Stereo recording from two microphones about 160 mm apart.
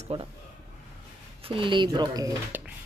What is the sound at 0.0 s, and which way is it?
Speech, 40° right (ahead or behind).